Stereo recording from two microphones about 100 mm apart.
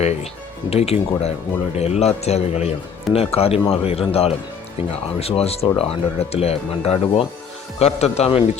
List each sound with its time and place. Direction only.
0.0 s speech: 90° left